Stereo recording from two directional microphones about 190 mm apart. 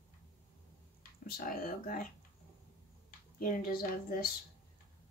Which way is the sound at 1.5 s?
45° left (ahead or behind).